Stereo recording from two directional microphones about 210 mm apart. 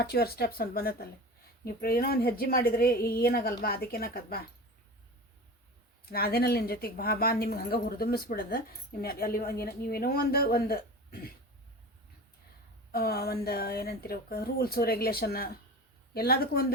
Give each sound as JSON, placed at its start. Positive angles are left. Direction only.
{"t": 0.0, "sound": "speech", "side_deg": 50}
{"t": 6.1, "sound": "speech", "side_deg": 45}
{"t": 12.9, "sound": "speech", "side_deg": 45}